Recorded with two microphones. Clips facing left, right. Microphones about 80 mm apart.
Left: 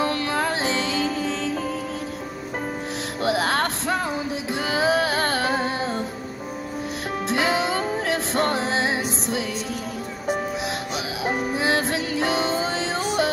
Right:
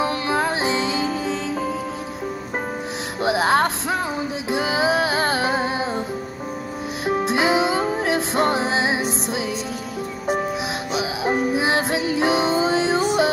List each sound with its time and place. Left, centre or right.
0.0 s music: centre
3.2 s music: centre
7.1 s music: centre
11.0 s music: centre